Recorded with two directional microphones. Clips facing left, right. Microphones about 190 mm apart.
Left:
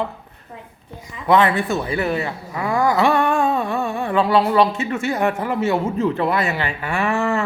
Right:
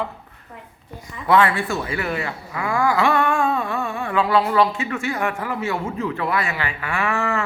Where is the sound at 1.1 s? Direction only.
20° left (ahead or behind).